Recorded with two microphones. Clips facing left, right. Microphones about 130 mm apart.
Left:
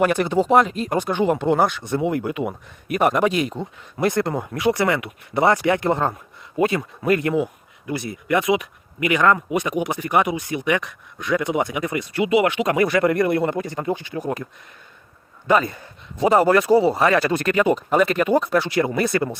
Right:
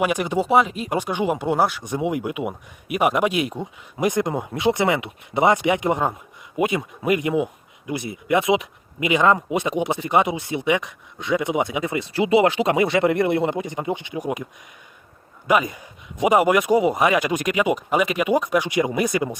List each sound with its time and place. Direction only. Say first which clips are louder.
0.0 s speech: left 3 dB; 10° right (ahead or behind)
15.4 s speech: left 1 dB; 10° right (ahead or behind)